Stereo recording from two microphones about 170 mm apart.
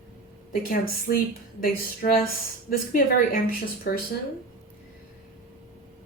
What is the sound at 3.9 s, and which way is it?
Speech, 65° left (ahead or behind).